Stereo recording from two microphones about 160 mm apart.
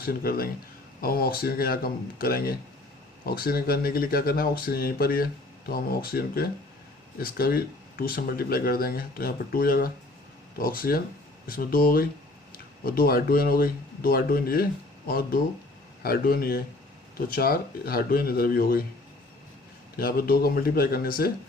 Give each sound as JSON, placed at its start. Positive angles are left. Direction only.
{"t": 0.0, "sound": "speech", "side_deg": 70}
{"t": 20.0, "sound": "speech", "side_deg": 65}